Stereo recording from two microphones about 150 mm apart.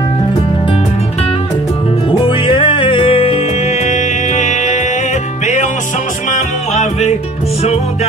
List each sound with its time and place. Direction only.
2.0 s music: 35° left (ahead or behind); by 4.8 s 55° left (ahead or behind)
6.3 s music: 50° left (ahead or behind)